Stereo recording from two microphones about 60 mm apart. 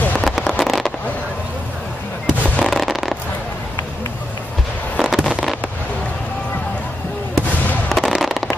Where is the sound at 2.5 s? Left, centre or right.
Centre.